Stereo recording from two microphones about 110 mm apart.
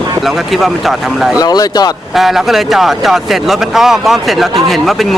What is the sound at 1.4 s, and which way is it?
Speech, 35° left (ahead or behind).